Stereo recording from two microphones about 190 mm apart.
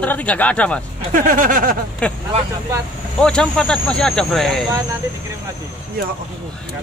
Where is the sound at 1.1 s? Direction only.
45° right (ahead or behind).